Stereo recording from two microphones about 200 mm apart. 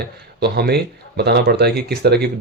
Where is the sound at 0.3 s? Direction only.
55° right (ahead or behind).